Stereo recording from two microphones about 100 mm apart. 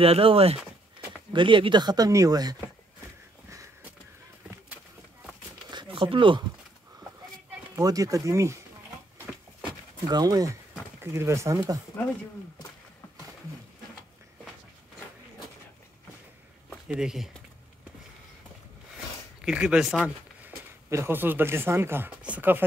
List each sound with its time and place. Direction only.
0.0 s speech: 70° right (ahead or behind)
1.3 s speech: 55° right (ahead or behind); by 2.5 s 40° right (ahead or behind)
5.7 s a sound: 55° right (ahead or behind)
7.8 s speech: 35° right (ahead or behind)
9.3 s a sound: 5° right (ahead or behind)
9.7 s a sound: 45° right (ahead or behind)
11.0 s speech: 30° right (ahead or behind)
16.8 s speech: 5° right (ahead or behind)
19.4 s speech: 10° right (ahead or behind)
20.9 s speech: 25° right (ahead or behind)